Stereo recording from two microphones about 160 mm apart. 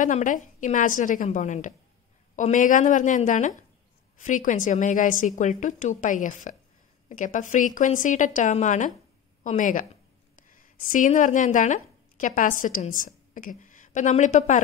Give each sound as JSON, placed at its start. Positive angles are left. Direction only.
{"t": 0.0, "sound": "a woman's voice", "side_deg": 55}
{"t": 10.9, "sound": "a woman's voice", "side_deg": 55}